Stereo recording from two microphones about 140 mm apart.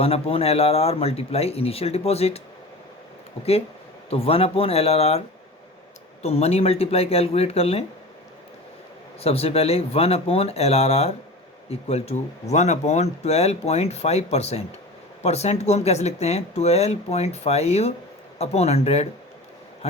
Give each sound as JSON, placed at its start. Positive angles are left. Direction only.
{"t": 0.0, "sound": "speech", "side_deg": 45}
{"t": 4.1, "sound": "speech", "side_deg": 45}
{"t": 6.2, "sound": "speech", "side_deg": 45}
{"t": 9.2, "sound": "speech", "side_deg": 45}